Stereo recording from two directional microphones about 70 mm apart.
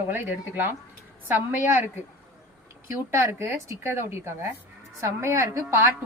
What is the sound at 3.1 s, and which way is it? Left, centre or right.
A woman's voice, right.